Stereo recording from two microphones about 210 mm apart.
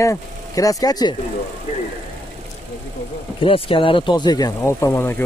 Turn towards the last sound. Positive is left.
turn(degrees=10)  # may be behind; listen again after turning